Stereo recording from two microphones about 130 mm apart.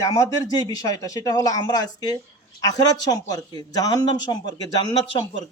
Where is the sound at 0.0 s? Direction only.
25° left (ahead or behind).